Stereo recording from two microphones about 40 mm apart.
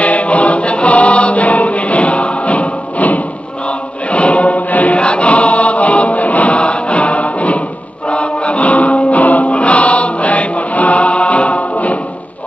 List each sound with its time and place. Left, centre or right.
0.0 s choir: left
4.9 s choir: left
8.1 s music: left